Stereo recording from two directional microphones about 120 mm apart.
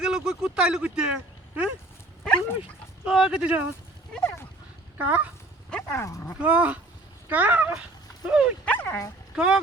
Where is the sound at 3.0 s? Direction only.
5° right (ahead or behind).